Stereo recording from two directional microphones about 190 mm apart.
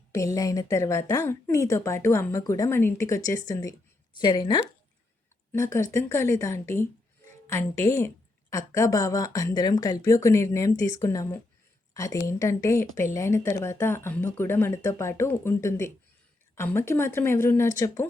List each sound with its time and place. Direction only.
0.1 s a woman's voice: 15° left (ahead or behind)